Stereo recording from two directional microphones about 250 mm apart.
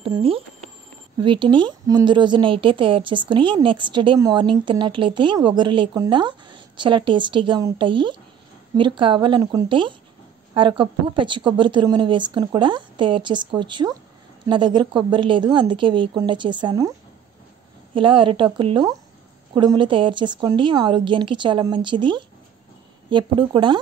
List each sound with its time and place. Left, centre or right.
0.0 s a woman's voice: right
17.9 s a woman's voice: centre